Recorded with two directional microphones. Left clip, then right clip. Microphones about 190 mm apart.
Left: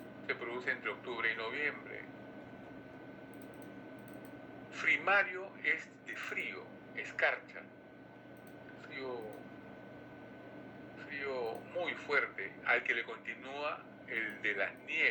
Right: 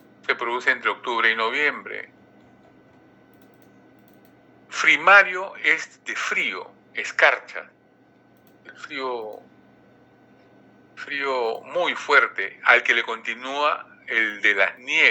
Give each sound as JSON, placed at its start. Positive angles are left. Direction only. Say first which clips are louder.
{"t": 0.3, "sound": "speech", "louder": "right 16 dB", "side_deg": -55}
{"t": 4.7, "sound": "speech", "louder": "right 16 dB", "side_deg": -55}
{"t": 8.8, "sound": "speech", "louder": "right 15 dB", "side_deg": -55}
{"t": 10.9, "sound": "speech", "louder": "right 15 dB", "side_deg": -50}